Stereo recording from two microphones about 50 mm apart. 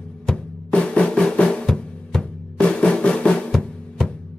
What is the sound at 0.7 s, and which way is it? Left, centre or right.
Drum, left.